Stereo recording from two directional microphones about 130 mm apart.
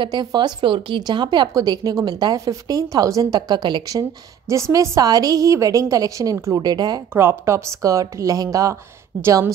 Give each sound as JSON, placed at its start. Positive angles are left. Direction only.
{"t": 0.0, "sound": "speech", "side_deg": -35}
{"t": 4.5, "sound": "a woman's voice", "side_deg": -25}
{"t": 7.2, "sound": "a woman's voice", "side_deg": -20}